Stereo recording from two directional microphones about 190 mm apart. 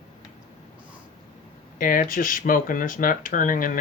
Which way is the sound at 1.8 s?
45° left (ahead or behind).